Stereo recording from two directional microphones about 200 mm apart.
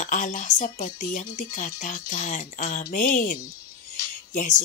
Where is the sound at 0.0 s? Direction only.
40° left (ahead or behind).